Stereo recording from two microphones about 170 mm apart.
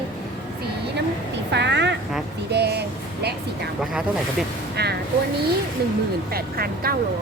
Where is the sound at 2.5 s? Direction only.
75° right (ahead or behind).